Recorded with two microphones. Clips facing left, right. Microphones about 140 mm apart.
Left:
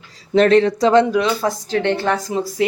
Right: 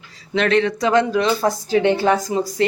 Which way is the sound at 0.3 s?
35° left (ahead or behind).